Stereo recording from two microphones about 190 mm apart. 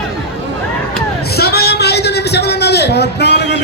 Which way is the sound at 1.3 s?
55° left (ahead or behind).